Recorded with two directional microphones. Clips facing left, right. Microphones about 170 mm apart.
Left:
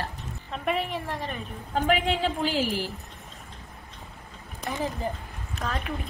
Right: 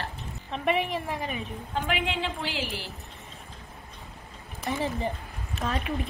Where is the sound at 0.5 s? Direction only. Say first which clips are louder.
Right 2 dB; centre (ahead or behind).